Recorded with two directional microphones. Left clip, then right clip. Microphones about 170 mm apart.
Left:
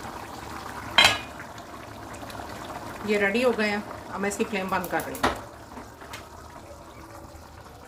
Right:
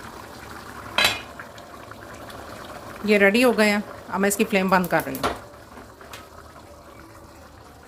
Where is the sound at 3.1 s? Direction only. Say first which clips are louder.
Right 6 dB; 85° right; by 5.0 s 70° right (ahead or behind).